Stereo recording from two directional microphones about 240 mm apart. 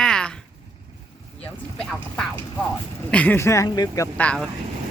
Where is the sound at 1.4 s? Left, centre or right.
Centre.